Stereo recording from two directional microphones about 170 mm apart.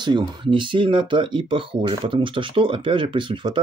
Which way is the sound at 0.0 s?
25° right (ahead or behind).